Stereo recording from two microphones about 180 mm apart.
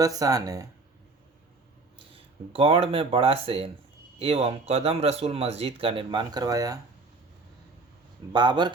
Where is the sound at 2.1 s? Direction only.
30° right (ahead or behind).